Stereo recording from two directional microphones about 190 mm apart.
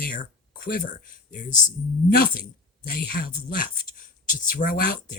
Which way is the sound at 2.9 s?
50° left (ahead or behind).